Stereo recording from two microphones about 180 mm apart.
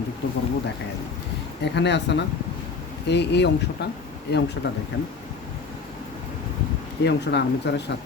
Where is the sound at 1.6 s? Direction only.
75° left (ahead or behind).